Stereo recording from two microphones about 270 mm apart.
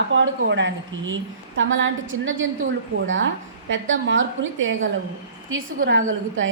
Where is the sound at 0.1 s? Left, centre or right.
Right.